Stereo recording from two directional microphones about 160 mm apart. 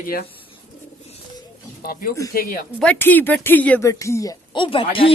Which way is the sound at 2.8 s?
10° left (ahead or behind).